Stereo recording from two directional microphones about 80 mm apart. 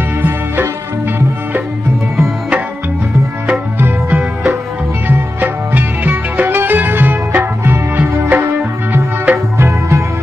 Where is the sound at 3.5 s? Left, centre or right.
Right.